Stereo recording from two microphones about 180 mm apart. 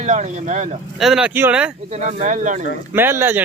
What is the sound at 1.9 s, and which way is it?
Speech, 40° right (ahead or behind).